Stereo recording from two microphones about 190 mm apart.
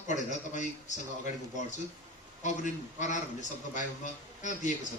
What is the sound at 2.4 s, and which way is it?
A man's voice, 40° left (ahead or behind).